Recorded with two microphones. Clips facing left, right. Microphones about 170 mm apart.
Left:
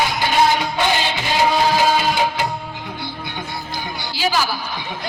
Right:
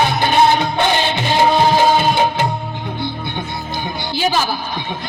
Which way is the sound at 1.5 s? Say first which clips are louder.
Right 4 dB; 25° right (ahead or behind).